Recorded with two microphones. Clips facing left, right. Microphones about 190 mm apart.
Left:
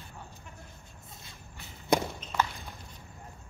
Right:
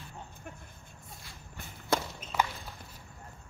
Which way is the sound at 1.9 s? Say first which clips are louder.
Left 4 dB; 15° left (ahead or behind).